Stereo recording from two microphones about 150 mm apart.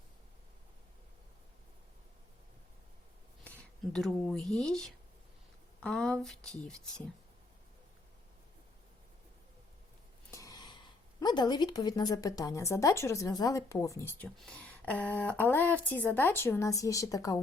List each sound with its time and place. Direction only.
3.4 s speech: 10° left (ahead or behind)
10.3 s speech: 25° left (ahead or behind)